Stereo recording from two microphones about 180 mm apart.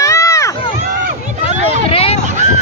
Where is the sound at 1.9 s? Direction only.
30° left (ahead or behind).